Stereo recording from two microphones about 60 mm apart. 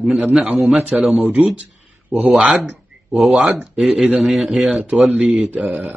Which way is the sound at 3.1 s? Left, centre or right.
Centre.